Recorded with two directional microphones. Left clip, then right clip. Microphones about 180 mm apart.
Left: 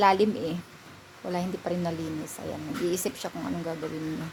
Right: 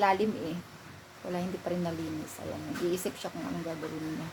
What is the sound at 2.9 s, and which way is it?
Speech, 45° left (ahead or behind).